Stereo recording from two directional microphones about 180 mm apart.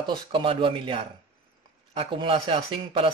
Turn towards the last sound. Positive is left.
turn(degrees=-30)  # may be behind; listen again after turning